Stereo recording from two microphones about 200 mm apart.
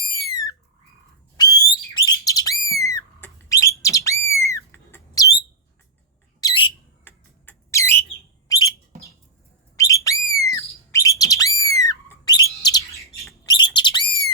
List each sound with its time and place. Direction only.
1.4 s bird: 20° left (ahead or behind)
6.4 s bird: 25° left (ahead or behind)
7.0 s bird: 10° left (ahead or behind)
8.9 s a sound: 50° right (ahead or behind)
9.7 s whistle: 15° left (ahead or behind)
13.4 s bird: 20° left (ahead or behind)